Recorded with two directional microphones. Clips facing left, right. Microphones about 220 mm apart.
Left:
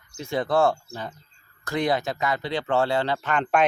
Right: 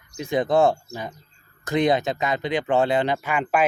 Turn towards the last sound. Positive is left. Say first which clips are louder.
# even
turn(degrees=-5)  # may be behind; listen again after turning